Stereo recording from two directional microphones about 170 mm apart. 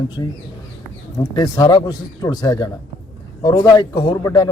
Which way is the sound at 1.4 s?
20° left (ahead or behind).